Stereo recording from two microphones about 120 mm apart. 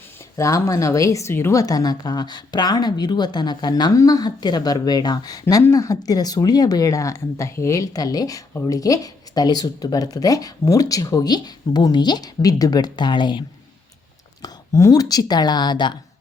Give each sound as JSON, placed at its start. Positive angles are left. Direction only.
{"t": 0.3, "sound": "speech", "side_deg": 25}
{"t": 14.4, "sound": "speech", "side_deg": 25}